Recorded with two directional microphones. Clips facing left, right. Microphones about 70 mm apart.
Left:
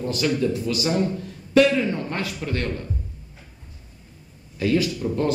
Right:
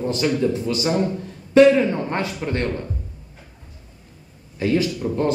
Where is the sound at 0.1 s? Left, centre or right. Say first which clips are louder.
Right 1 dB; right.